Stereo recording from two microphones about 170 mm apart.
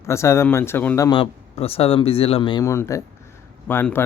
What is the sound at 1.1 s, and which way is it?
Speech, 35° left (ahead or behind).